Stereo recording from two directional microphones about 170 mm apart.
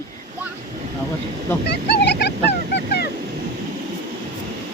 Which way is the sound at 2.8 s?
70° left (ahead or behind).